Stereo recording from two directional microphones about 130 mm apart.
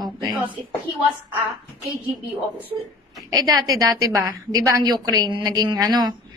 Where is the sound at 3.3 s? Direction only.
30° right (ahead or behind).